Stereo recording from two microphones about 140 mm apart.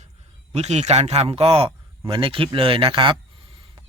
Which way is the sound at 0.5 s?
50° right (ahead or behind).